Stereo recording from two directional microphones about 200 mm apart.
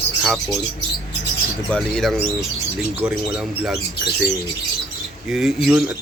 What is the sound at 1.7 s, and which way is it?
Speech, centre (ahead or behind).